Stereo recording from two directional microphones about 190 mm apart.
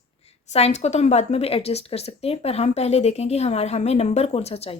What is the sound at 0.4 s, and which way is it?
A woman's voice, 35° left (ahead or behind).